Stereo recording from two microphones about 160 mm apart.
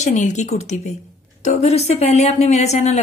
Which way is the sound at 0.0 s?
50° left (ahead or behind).